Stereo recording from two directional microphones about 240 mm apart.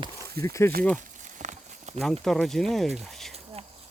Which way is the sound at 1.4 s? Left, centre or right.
Right.